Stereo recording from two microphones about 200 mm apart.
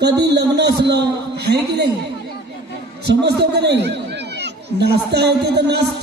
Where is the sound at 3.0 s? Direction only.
55° right (ahead or behind).